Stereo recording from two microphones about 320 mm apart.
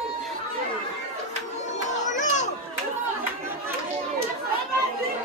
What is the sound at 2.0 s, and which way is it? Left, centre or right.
Children playing, left.